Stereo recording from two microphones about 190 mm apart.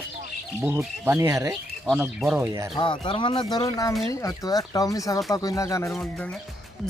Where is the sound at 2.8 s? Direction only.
25° left (ahead or behind).